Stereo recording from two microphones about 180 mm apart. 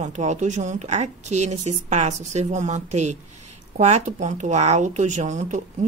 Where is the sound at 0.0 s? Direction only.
40° right (ahead or behind).